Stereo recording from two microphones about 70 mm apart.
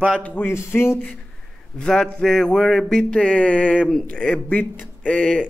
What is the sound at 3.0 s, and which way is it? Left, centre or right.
Speech, centre.